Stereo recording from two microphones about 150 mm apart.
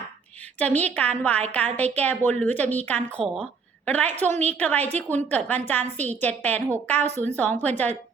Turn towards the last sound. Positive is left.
turn(degrees=10)  # may be behind; listen again after turning